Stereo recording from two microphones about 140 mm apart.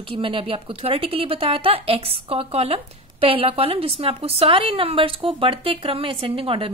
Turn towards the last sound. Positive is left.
turn(degrees=-40)  # may be behind; listen again after turning